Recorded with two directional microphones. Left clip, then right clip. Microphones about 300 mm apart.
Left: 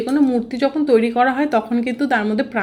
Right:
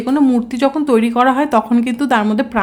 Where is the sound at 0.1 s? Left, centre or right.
Centre.